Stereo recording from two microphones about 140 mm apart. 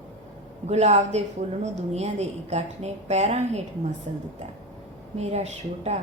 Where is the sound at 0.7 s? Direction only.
50° right (ahead or behind).